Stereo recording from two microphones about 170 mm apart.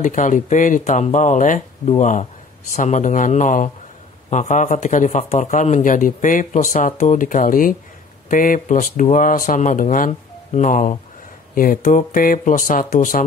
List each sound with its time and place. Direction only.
0.0 s speech: 50° left (ahead or behind)